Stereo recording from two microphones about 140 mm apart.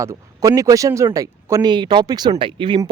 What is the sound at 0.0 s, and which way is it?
Speech, 25° right (ahead or behind).